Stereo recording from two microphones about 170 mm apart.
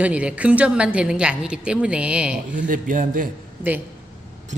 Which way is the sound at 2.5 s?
50° right (ahead or behind).